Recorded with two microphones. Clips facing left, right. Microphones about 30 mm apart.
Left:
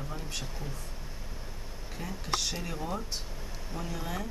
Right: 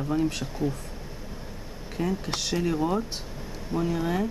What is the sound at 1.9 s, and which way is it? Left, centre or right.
Speech, centre.